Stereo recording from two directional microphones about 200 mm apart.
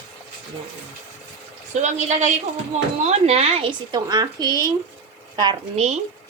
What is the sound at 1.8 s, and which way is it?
A woman's voice, 35° right (ahead or behind).